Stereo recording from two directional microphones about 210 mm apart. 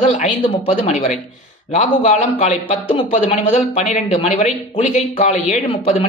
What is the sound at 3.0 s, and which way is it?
A man's voice, 30° left (ahead or behind).